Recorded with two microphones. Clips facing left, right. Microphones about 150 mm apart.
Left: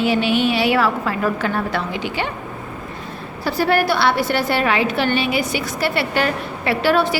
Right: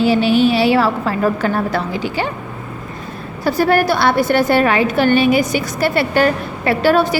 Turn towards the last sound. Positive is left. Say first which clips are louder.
# right 3 dB
turn(degrees=-45)  # may be behind; listen again after turning